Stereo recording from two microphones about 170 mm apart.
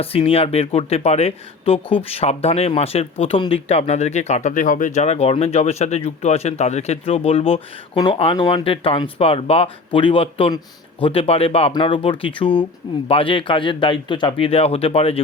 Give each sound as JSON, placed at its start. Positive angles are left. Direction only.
{"t": 0.0, "sound": "speech", "side_deg": 35}